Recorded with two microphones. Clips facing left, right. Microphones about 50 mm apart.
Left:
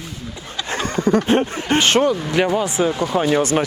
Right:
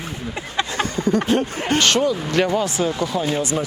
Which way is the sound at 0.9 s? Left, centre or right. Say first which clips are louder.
Left 6 dB; left.